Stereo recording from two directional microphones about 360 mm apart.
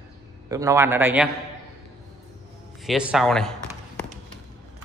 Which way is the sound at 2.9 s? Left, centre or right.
Centre.